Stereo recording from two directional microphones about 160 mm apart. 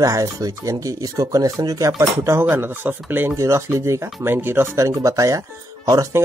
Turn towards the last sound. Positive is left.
turn(degrees=-20)  # may be behind; listen again after turning